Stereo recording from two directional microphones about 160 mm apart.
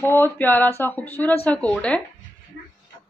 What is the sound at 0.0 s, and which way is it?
Speech, 15° left (ahead or behind).